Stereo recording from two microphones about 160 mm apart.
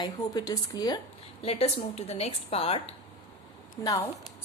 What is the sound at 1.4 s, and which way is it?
Speech, 40° left (ahead or behind).